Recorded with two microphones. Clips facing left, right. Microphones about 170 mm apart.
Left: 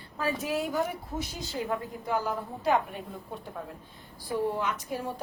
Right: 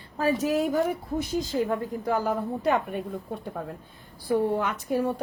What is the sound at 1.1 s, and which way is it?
A woman's voice, 50° right (ahead or behind).